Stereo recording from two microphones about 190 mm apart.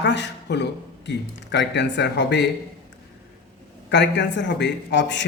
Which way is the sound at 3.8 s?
65° left (ahead or behind).